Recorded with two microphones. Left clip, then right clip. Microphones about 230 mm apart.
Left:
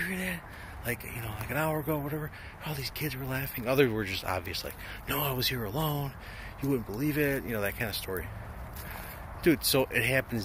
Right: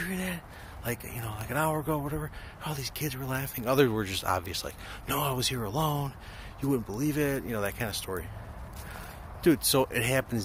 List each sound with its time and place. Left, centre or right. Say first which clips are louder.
0.0 s a sound: left 1 dB; right
0.8 s speech: even; right
9.4 s speech: right 1 dB; right